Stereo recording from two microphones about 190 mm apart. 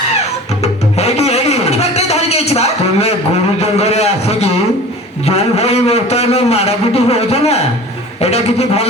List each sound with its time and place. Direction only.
0.6 s music: 35° left (ahead or behind)
3.6 s a sound: 35° left (ahead or behind)
5.2 s a man's voice: 35° left (ahead or behind)